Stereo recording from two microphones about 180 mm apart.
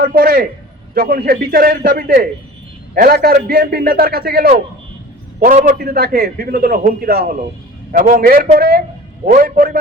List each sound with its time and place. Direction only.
0.0 s a man's voice: 55° right (ahead or behind)
5.4 s a man's voice: 45° right (ahead or behind)